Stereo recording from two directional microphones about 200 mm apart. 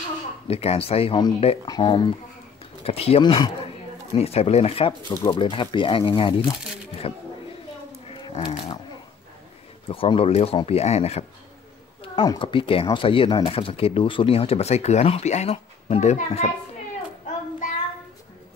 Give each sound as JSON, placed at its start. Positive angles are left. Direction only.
{"t": 0.5, "sound": "speech", "side_deg": 30}
{"t": 8.1, "sound": "a sound", "side_deg": 25}
{"t": 9.8, "sound": "speech", "side_deg": 25}